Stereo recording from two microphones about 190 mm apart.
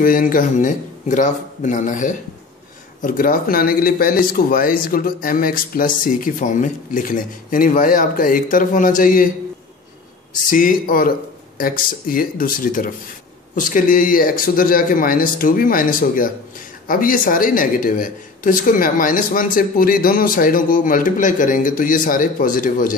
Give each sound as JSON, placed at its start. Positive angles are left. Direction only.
{"t": 0.0, "sound": "speech", "side_deg": 45}
{"t": 10.5, "sound": "speech", "side_deg": 45}